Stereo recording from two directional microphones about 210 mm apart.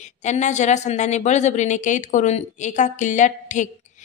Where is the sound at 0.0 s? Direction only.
35° left (ahead or behind).